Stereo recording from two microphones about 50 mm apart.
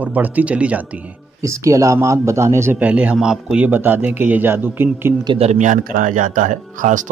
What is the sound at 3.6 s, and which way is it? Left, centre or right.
Speech, right.